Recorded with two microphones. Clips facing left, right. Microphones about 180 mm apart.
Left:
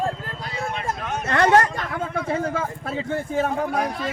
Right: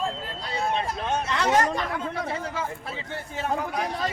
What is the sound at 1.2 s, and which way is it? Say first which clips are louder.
A man's voice: left 7 dB; 55° left (ahead or behind).